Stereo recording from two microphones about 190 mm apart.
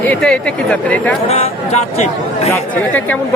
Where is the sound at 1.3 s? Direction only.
35° left (ahead or behind).